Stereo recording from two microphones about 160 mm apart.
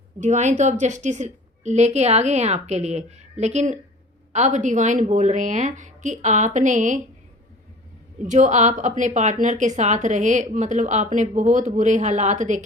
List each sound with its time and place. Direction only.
0.2 s a woman's voice: 45° right (ahead or behind)
8.2 s a woman's voice: 50° right (ahead or behind)